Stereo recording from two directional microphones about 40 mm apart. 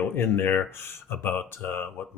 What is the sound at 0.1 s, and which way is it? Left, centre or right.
Speech, left.